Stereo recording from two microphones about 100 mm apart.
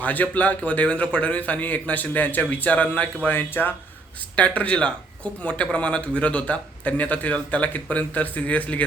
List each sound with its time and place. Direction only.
0.0 s speech: 15° left (ahead or behind)